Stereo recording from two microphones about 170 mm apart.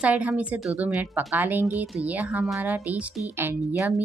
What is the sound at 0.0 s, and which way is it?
A woman's voice, 10° right (ahead or behind).